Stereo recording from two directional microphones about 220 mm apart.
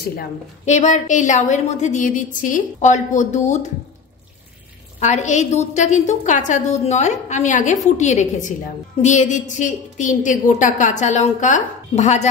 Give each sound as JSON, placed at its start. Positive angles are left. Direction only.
{"t": 0.7, "sound": "a woman's voice", "side_deg": 35}
{"t": 5.0, "sound": "a woman's voice", "side_deg": 30}